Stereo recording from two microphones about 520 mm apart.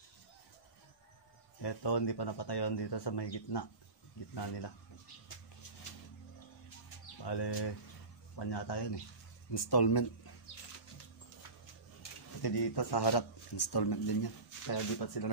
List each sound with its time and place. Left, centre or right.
1.6 s a man's voice: left
7.2 s a man's voice: left
12.4 s a man's voice: left